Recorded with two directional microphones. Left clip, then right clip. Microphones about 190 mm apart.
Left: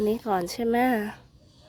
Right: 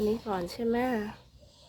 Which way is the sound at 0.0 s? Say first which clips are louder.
Left 5 dB; 35° left (ahead or behind).